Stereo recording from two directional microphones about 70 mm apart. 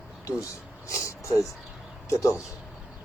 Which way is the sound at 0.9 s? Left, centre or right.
Left.